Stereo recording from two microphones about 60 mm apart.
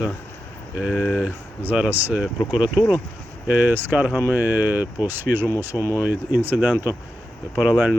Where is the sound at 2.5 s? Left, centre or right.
Centre.